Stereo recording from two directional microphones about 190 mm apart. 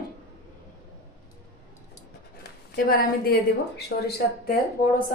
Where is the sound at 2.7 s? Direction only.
55° left (ahead or behind).